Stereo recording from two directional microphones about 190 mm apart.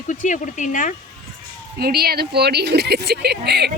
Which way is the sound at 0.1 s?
45° left (ahead or behind).